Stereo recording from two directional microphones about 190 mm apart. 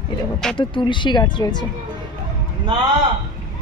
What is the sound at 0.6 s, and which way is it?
Speech, 25° left (ahead or behind).